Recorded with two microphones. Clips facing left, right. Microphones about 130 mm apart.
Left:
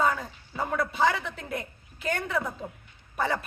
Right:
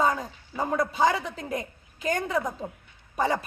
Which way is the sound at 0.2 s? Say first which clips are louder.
Right 2 dB; 15° right (ahead or behind).